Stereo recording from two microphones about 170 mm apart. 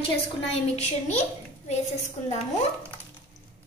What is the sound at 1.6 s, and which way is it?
Speech, 40° left (ahead or behind).